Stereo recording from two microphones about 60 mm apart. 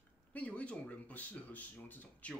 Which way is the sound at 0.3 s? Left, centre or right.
Left.